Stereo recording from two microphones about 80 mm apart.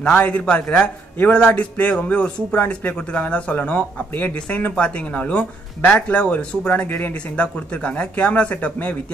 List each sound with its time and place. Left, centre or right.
0.0 s speech: centre